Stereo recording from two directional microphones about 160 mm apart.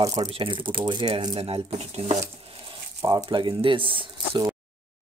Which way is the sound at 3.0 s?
25° right (ahead or behind).